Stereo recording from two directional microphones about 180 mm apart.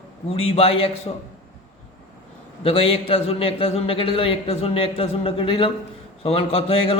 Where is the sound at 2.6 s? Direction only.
30° left (ahead or behind).